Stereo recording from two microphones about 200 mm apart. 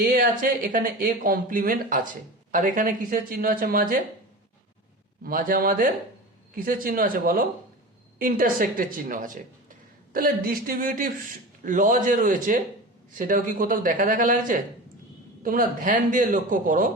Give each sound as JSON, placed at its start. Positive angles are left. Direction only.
{"t": 0.0, "sound": "a woman's voice", "side_deg": -45}
{"t": 5.2, "sound": "a woman's voice", "side_deg": -45}